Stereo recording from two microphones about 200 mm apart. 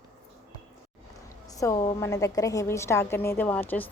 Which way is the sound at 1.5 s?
15° left (ahead or behind).